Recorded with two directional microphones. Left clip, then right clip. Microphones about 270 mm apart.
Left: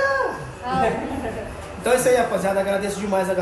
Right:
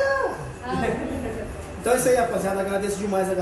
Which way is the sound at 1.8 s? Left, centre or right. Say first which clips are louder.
Left 2 dB; centre.